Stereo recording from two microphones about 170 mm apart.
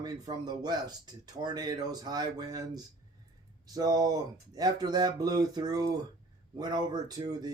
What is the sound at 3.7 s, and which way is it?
Speech, 20° right (ahead or behind).